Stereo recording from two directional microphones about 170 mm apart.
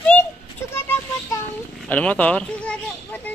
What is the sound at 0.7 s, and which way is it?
Vehicle, 15° left (ahead or behind).